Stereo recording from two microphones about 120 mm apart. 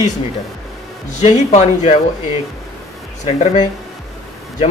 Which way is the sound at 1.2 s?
70° left (ahead or behind).